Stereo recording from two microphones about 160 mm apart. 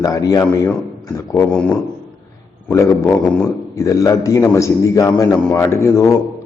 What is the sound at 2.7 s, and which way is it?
A man's voice, 20° left (ahead or behind).